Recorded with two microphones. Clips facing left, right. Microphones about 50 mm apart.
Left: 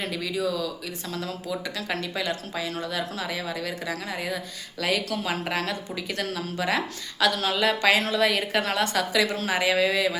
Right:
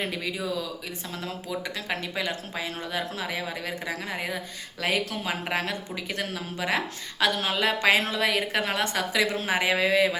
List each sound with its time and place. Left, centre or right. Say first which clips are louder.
0.0 s speech: left 3 dB; right